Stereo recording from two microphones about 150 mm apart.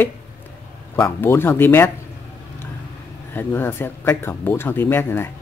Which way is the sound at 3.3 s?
15° left (ahead or behind).